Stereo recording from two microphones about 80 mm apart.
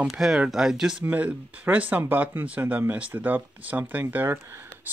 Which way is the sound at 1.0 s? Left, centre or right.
Centre.